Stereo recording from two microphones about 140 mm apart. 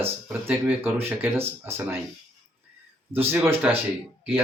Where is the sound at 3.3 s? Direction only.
15° right (ahead or behind).